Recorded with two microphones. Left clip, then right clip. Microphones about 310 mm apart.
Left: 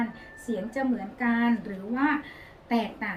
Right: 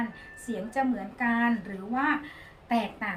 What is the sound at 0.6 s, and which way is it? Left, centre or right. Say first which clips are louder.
Speech: right 3 dB; centre.